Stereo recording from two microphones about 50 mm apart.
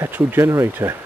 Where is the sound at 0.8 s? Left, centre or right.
Right.